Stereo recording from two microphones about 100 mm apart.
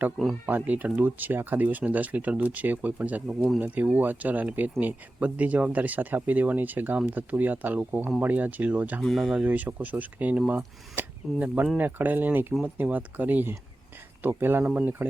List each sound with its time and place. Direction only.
0.4 s speech: 15° right (ahead or behind)
3.2 s speech: centre (ahead or behind)
3.6 s speech: 15° right (ahead or behind)
9.0 s speech: centre (ahead or behind)
9.4 s speech: 20° right (ahead or behind)